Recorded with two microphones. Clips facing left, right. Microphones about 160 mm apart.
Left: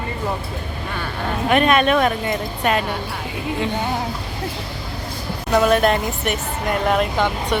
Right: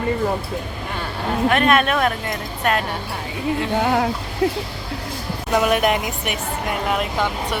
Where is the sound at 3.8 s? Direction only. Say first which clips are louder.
Right 5 dB; 85° right.